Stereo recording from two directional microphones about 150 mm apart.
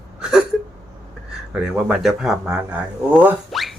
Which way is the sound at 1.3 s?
5° right (ahead or behind).